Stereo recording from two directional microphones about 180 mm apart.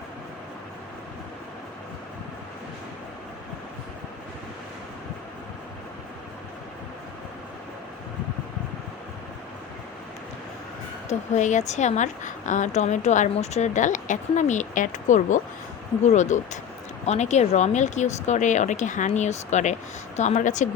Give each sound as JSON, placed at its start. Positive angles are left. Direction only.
{"t": 11.1, "sound": "a woman's voice", "side_deg": 40}